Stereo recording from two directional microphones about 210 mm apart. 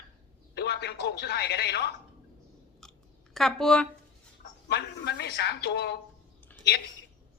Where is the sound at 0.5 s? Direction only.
50° left (ahead or behind).